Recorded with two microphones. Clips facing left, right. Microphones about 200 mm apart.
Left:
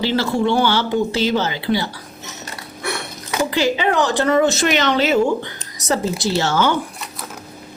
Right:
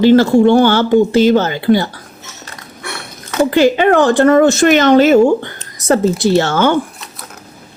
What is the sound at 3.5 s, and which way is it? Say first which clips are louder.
Speech: right 9 dB; 55° right (ahead or behind).